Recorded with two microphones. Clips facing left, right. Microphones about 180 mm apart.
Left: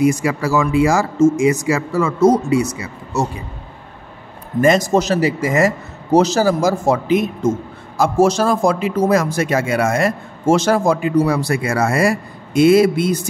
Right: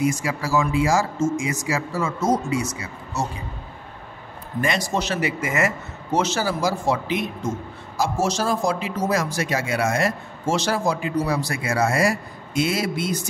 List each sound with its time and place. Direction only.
0.0 s a man's voice: 65° left (ahead or behind)
4.6 s a man's voice: 45° left (ahead or behind)